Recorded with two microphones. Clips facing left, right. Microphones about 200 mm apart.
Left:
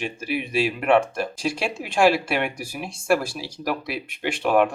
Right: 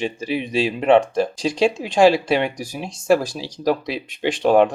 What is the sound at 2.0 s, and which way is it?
Speech, 25° right (ahead or behind).